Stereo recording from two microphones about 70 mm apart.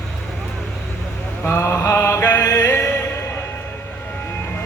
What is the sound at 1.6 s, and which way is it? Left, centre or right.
Mantra, left.